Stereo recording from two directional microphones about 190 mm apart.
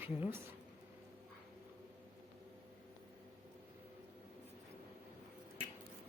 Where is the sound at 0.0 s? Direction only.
10° right (ahead or behind).